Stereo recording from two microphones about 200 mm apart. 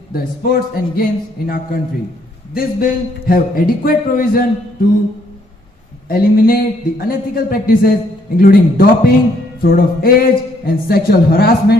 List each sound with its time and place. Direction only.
0.1 s a man's voice: 45° left (ahead or behind)
6.1 s a man's voice: 45° left (ahead or behind)